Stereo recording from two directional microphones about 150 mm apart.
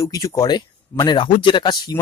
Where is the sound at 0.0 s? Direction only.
25° left (ahead or behind).